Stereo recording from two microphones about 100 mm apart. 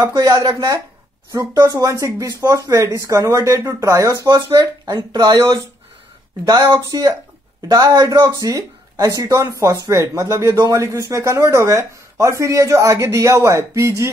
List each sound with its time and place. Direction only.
0.0 s speech: 30° right (ahead or behind)